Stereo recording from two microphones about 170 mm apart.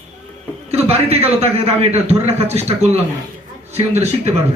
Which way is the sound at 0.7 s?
40° right (ahead or behind).